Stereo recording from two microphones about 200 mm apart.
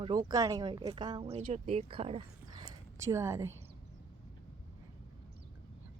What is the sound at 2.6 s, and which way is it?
Speech, 15° right (ahead or behind).